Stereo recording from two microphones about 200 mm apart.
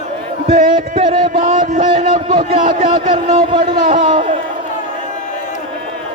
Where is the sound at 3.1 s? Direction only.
25° right (ahead or behind).